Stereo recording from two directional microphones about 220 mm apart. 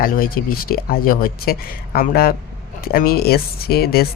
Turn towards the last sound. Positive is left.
turn(degrees=45)  # may be behind; listen again after turning